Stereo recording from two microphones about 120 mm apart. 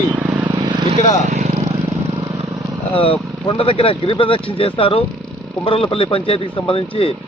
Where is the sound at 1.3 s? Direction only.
65° right (ahead or behind).